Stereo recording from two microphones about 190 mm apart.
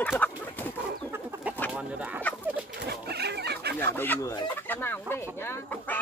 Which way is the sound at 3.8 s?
10° left (ahead or behind).